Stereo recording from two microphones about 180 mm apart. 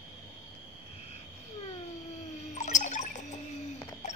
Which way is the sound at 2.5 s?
40° left (ahead or behind).